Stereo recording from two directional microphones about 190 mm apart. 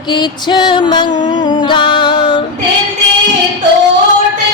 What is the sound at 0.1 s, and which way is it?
Music, 25° left (ahead or behind).